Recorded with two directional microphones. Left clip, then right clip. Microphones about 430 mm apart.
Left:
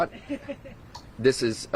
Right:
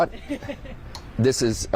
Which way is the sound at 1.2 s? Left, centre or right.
Right.